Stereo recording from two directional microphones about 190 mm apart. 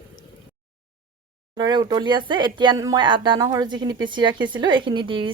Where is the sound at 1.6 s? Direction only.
20° right (ahead or behind).